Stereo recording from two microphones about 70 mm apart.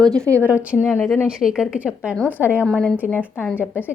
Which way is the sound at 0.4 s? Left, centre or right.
Right.